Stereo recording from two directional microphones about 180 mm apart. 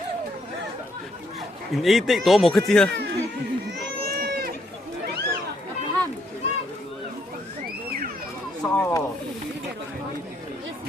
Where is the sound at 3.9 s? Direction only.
55° right (ahead or behind).